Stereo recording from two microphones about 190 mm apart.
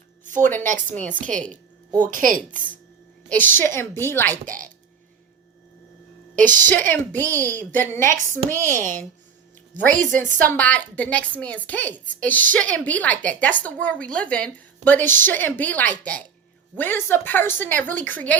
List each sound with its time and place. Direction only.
0.6 s a woman's voice: 40° right (ahead or behind)
3.2 s a woman's voice: 10° left (ahead or behind)
4.4 s a woman's voice: 45° right (ahead or behind)
6.3 s a woman's voice: 45° right (ahead or behind)
6.6 s a woman's voice: 10° left (ahead or behind)
9.8 s a woman's voice: 45° right (ahead or behind)
10.2 s a woman's voice: 10° left (ahead or behind)